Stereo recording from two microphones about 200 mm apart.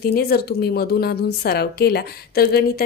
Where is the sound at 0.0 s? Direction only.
50° left (ahead or behind).